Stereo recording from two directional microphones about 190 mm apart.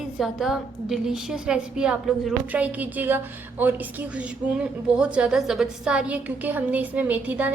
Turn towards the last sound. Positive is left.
turn(degrees=-10)  # may be behind; listen again after turning